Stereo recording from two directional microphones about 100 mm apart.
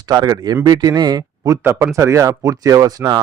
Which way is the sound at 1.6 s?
25° right (ahead or behind).